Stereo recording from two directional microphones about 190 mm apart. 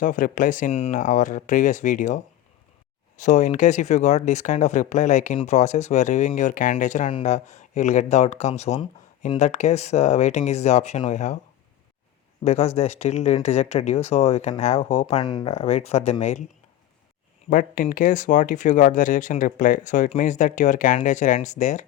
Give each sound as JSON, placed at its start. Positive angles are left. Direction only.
{"t": 0.0, "sound": "speech", "side_deg": 45}
{"t": 12.5, "sound": "speech", "side_deg": 35}
{"t": 15.2, "sound": "speech", "side_deg": 20}
{"t": 15.5, "sound": "speech", "side_deg": 35}
{"t": 17.5, "sound": "speech", "side_deg": 45}